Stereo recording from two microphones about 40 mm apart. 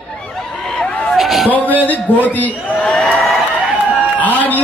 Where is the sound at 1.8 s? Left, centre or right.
Left.